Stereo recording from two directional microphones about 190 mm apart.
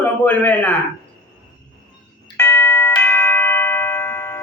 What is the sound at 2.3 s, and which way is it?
Doorbell, 15° left (ahead or behind).